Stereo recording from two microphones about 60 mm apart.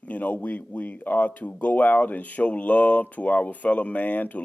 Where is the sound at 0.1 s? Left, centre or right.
Left.